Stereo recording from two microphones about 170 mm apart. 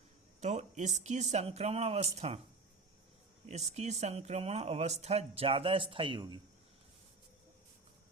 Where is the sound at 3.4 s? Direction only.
40° right (ahead or behind).